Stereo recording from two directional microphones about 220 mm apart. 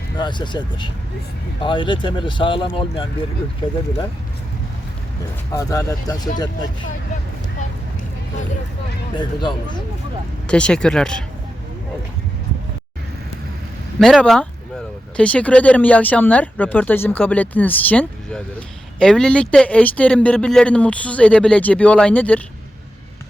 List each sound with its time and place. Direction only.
0.2 s speech: 20° left (ahead or behind)
5.5 s speech: 15° left (ahead or behind)
9.1 s speech: 20° left (ahead or behind)
10.5 s a man's voice: 5° left (ahead or behind)
14.0 s a man's voice: centre (ahead or behind)